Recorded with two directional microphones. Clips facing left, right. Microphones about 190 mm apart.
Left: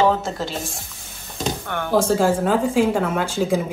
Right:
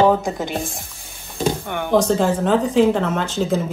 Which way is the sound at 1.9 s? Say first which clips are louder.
Right 1 dB; 5° left (ahead or behind).